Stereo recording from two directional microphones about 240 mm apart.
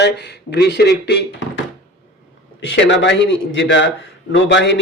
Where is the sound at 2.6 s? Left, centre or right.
Left.